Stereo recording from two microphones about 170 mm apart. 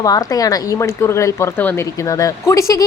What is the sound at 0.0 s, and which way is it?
A woman's voice, 20° left (ahead or behind).